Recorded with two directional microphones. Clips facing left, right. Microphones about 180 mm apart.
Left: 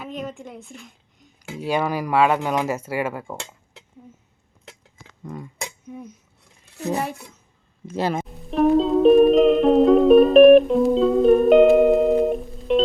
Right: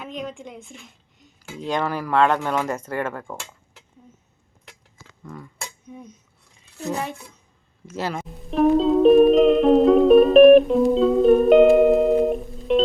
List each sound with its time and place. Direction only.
0.0 s a woman's voice: 5° left (ahead or behind)
5.2 s a sound: 20° left (ahead or behind)
5.9 s cutlery: 5° left (ahead or behind)
7.9 s speech: 15° left (ahead or behind)
8.4 s music: centre (ahead or behind)